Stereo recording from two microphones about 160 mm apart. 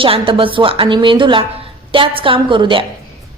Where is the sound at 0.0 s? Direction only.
35° right (ahead or behind).